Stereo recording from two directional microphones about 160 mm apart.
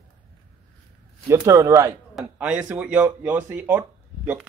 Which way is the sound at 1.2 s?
20° right (ahead or behind).